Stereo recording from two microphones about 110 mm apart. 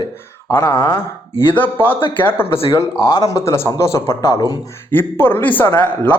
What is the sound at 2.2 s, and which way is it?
Speech, 20° left (ahead or behind).